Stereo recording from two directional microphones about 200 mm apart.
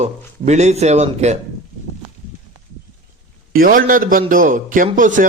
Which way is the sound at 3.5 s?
45° right (ahead or behind).